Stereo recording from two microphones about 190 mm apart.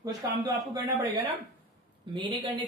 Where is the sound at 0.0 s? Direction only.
20° right (ahead or behind).